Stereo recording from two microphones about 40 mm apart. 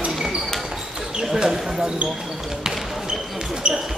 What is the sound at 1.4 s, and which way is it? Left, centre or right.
Speech, centre.